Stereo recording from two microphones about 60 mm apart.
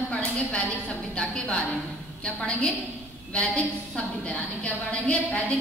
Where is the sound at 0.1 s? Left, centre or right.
Centre.